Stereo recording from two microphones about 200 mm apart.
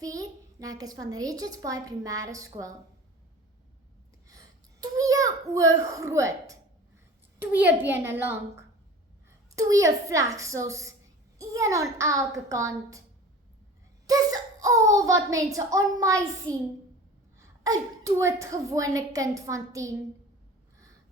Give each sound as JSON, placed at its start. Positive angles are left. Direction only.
{"t": 0.0, "sound": "a child's voice", "side_deg": -15}
{"t": 4.8, "sound": "a child's voice", "side_deg": -15}
{"t": 14.1, "sound": "a child's voice", "side_deg": -20}
{"t": 17.6, "sound": "a woman's voice", "side_deg": -15}